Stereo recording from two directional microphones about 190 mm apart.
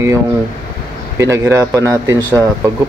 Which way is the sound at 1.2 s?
15° right (ahead or behind).